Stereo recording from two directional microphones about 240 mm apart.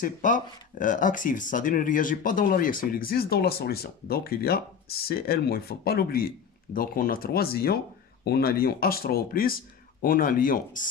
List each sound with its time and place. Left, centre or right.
0.0 s speech: left